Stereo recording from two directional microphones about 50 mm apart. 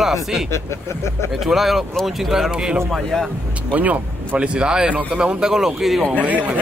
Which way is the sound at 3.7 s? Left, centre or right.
Right.